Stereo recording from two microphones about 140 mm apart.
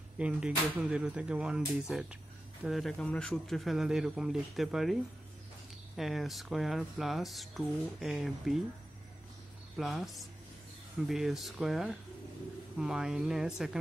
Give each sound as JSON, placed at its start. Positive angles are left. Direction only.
{"t": 0.2, "sound": "speech", "side_deg": -5}
{"t": 9.8, "sound": "speech", "side_deg": 0}